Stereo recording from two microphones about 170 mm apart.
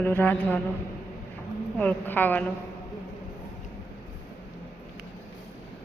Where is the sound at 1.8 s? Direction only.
10° left (ahead or behind).